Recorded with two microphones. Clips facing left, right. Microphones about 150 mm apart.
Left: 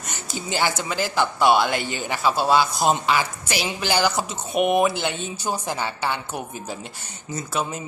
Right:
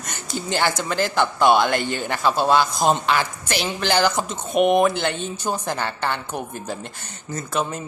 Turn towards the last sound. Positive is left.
turn(degrees=10)  # may be behind; listen again after turning